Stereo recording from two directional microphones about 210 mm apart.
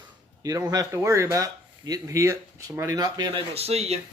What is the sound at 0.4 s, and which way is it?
Speech, 15° right (ahead or behind).